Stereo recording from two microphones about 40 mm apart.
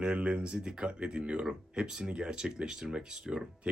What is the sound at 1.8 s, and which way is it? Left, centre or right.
Speech, centre.